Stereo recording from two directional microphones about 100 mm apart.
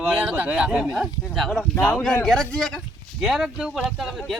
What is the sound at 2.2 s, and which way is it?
Speech, 5° left (ahead or behind).